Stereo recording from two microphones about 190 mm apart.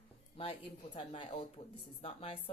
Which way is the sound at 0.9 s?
30° left (ahead or behind).